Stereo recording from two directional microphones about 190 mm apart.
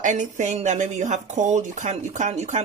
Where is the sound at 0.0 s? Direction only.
40° right (ahead or behind).